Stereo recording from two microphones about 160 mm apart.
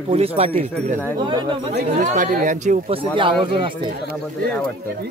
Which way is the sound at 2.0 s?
50° right (ahead or behind).